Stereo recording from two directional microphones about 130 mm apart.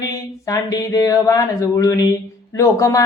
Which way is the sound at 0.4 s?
30° left (ahead or behind).